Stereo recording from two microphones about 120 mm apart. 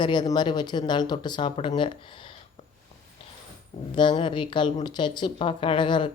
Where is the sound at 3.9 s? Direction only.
40° left (ahead or behind).